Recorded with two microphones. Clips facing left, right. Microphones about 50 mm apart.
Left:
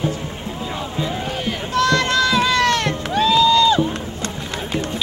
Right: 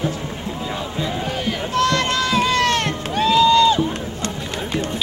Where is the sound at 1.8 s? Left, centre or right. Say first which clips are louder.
Left 3 dB; right.